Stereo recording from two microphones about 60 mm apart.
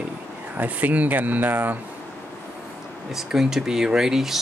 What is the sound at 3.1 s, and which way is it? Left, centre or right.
Speech, centre.